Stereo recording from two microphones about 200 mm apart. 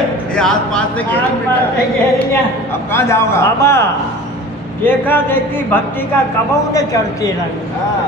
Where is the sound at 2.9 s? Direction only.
15° left (ahead or behind).